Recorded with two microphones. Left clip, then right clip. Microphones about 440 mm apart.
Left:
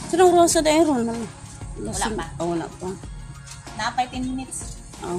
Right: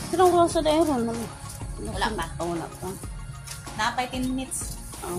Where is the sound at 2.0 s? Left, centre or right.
Right.